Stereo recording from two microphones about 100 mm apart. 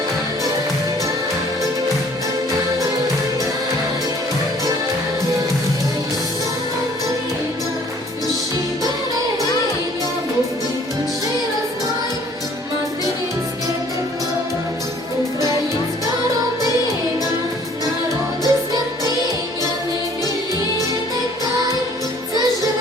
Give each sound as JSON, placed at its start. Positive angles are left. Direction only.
{"t": 18.4, "sound": "music", "side_deg": -40}